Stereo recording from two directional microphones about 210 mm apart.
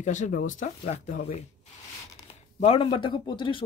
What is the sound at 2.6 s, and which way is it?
Speech, 25° left (ahead or behind).